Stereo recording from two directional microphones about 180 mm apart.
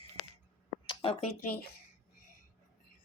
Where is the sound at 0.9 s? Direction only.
30° left (ahead or behind).